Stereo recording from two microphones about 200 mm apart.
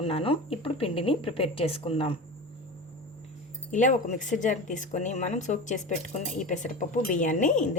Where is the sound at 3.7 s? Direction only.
40° left (ahead or behind).